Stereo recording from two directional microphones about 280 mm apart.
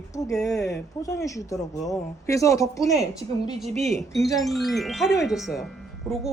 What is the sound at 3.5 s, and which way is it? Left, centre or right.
Speech, centre.